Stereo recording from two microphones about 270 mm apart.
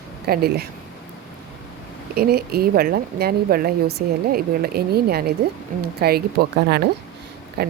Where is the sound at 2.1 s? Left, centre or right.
Right.